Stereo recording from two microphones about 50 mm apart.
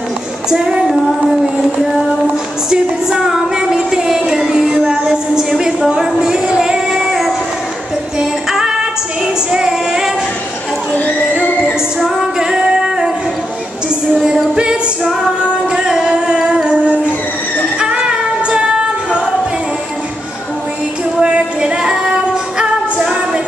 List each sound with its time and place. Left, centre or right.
0.5 s child singing: centre
2.7 s a sound: centre
5.9 s music: centre
6.9 s music: centre
8.2 s female singing: centre
11.6 s music: centre
14.1 s music: centre
15.7 s music: centre
21.2 s female singing: right